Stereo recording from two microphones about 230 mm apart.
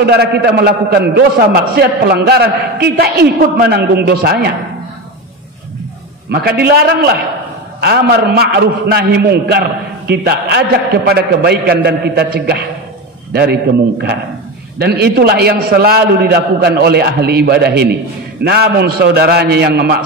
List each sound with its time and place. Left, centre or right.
0.0 s a man's voice: right
6.3 s a man's voice: right
14.8 s a man's voice: right